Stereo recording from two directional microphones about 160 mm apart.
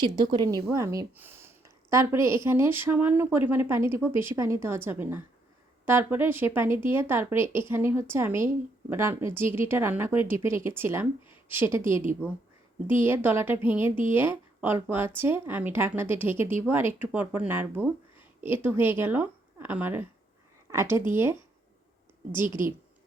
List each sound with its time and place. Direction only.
0.0 s speech: 30° right (ahead or behind)
22.3 s a woman's voice: 30° left (ahead or behind)